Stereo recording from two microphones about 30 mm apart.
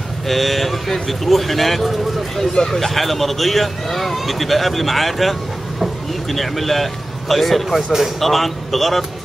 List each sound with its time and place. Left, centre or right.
0.3 s speech: centre
2.5 s speech: left
2.8 s speech: centre